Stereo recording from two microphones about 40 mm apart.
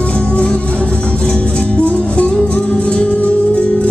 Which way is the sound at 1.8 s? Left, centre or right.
Left.